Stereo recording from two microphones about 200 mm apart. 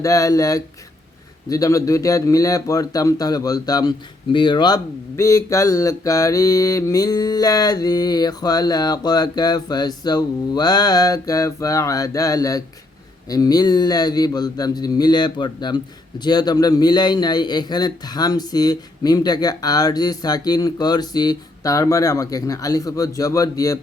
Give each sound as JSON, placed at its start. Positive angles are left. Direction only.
{"t": 0.0, "sound": "a man's voice", "side_deg": 15}